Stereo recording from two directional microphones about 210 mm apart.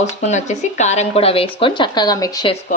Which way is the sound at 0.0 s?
35° left (ahead or behind).